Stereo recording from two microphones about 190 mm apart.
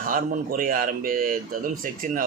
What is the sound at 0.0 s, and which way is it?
A man's voice, 45° right (ahead or behind).